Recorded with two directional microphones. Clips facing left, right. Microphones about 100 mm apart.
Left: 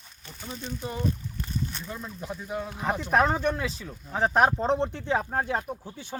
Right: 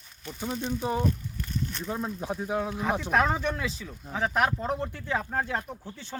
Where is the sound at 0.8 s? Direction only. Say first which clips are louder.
Right 5 dB; 25° right (ahead or behind).